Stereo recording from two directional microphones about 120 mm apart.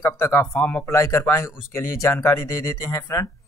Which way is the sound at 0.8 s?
25° left (ahead or behind).